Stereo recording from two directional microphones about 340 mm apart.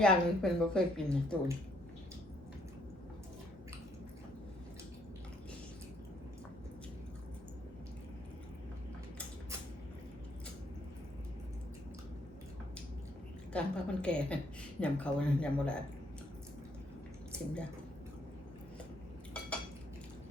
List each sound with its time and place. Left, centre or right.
0.0 s a woman's voice: centre
13.5 s a woman's voice: centre
17.3 s speech: centre